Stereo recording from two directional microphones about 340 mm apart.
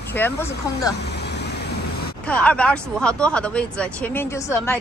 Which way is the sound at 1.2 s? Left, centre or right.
Left.